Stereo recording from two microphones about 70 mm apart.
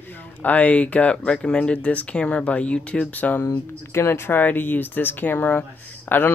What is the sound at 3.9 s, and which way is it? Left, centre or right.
Speech, left.